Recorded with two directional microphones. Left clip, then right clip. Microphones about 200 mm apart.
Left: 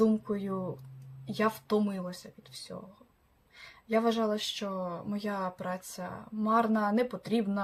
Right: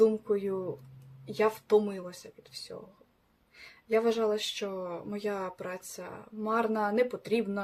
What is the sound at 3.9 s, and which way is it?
Speech, centre (ahead or behind).